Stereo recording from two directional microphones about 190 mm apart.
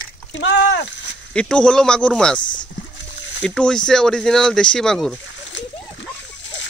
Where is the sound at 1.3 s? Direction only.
5° left (ahead or behind).